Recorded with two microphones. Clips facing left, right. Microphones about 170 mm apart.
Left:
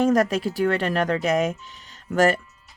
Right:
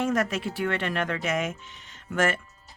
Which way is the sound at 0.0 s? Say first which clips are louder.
Left 6 dB; 35° left (ahead or behind).